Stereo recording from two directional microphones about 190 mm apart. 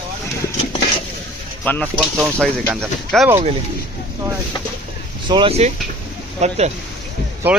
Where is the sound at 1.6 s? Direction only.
10° left (ahead or behind).